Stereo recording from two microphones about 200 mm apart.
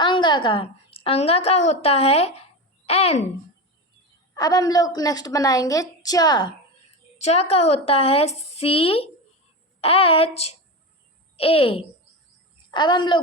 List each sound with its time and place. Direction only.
0.0 s a woman's voice: 25° left (ahead or behind)
4.4 s a woman's voice: 20° left (ahead or behind)
7.2 s a woman's voice: 30° left (ahead or behind)